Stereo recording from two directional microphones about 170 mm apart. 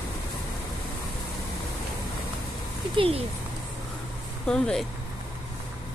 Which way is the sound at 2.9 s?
35° right (ahead or behind).